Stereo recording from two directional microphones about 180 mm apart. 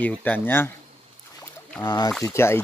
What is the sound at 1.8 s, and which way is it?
Speech, 20° left (ahead or behind).